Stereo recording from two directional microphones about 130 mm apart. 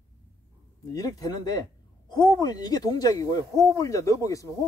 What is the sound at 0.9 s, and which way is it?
Speech, 30° left (ahead or behind).